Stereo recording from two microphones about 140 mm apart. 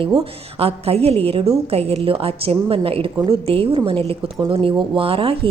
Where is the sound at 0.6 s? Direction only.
45° right (ahead or behind).